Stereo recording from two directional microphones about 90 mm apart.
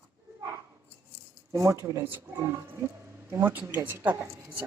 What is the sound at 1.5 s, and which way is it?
Speech, 35° right (ahead or behind).